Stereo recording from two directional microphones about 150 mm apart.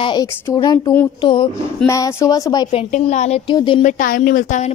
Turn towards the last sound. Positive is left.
turn(degrees=60)  # may be behind; listen again after turning